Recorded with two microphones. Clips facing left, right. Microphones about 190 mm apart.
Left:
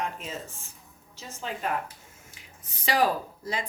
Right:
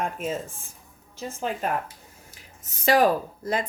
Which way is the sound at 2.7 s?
50° right (ahead or behind).